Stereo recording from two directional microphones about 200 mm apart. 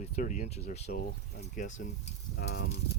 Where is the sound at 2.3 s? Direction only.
55° left (ahead or behind).